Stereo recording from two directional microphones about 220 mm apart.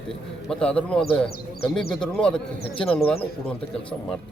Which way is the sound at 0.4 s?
5° left (ahead or behind).